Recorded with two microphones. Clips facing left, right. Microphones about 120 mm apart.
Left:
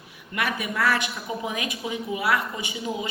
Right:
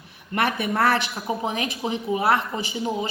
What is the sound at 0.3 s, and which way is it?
A woman's voice, 35° right (ahead or behind).